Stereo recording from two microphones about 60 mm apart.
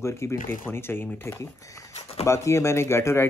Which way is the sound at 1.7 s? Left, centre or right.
Left.